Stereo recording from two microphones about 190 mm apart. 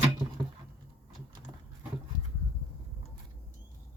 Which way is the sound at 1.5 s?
25° right (ahead or behind).